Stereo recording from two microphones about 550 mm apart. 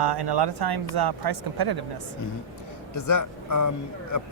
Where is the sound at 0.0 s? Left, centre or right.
Right.